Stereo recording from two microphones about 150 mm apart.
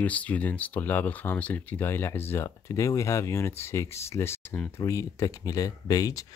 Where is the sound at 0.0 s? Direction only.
10° left (ahead or behind).